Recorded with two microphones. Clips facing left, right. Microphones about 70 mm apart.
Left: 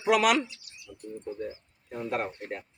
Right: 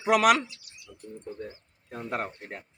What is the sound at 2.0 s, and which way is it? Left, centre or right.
Speech, right.